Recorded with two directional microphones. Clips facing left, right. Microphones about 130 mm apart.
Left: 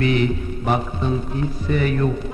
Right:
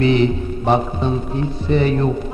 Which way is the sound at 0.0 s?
25° right (ahead or behind).